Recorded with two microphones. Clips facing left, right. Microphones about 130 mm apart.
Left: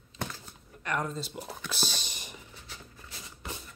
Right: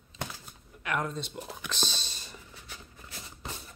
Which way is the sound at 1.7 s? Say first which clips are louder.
Even; 10° left (ahead or behind).